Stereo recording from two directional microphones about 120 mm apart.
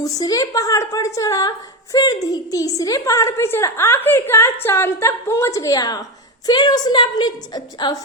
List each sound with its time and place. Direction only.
0.0 s a woman's voice: 30° left (ahead or behind)